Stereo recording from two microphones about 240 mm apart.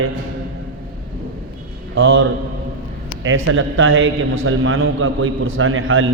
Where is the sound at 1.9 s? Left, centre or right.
Right.